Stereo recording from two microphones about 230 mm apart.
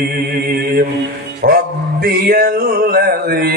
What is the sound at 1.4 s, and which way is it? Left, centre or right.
Mantra, right.